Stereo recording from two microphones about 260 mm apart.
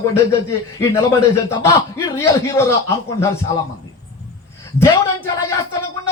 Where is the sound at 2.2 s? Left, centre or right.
Centre.